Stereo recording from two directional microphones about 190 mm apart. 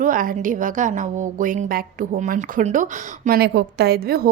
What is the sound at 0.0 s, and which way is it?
A woman's voice, 45° right (ahead or behind).